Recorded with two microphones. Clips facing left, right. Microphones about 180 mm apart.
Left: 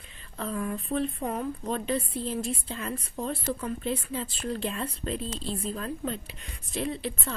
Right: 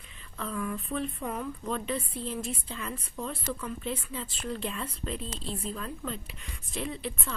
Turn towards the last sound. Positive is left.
turn(degrees=35)  # may be behind; listen again after turning